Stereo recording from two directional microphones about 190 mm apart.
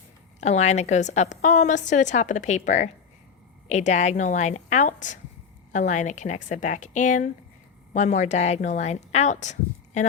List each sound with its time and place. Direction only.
0.3 s a woman's voice: 35° left (ahead or behind)